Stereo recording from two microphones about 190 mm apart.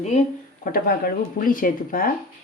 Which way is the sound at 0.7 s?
50° left (ahead or behind).